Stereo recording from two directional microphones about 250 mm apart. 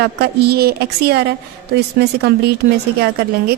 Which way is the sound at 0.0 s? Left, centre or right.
Right.